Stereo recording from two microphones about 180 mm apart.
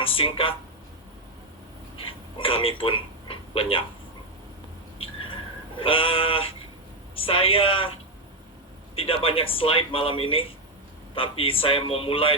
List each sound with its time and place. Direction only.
0.0 s speech: 30° left (ahead or behind)
2.0 s a sound: 30° left (ahead or behind)
5.8 s speech: 30° left (ahead or behind)
9.0 s speech: 30° left (ahead or behind)